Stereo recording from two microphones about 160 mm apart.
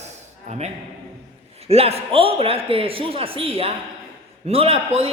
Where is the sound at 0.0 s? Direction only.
45° right (ahead or behind).